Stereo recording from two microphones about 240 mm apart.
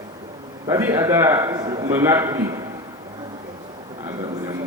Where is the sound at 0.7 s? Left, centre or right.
Centre.